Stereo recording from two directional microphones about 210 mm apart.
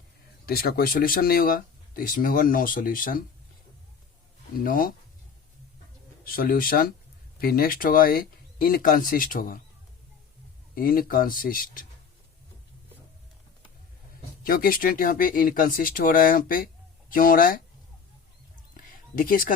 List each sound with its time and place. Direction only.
0.4 s speech: 45° left (ahead or behind)
4.6 s speech: 45° left (ahead or behind)
6.2 s speech: 45° left (ahead or behind)
10.8 s speech: 45° left (ahead or behind)
14.4 s speech: 45° left (ahead or behind)
19.1 s speech: 40° left (ahead or behind)